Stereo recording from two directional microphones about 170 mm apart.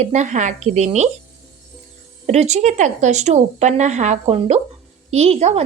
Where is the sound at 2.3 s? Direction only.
40° right (ahead or behind).